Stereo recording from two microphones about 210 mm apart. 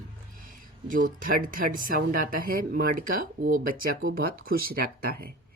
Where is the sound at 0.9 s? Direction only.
40° right (ahead or behind).